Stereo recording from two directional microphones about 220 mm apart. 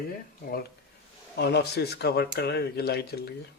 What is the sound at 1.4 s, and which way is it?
Speech, 50° left (ahead or behind).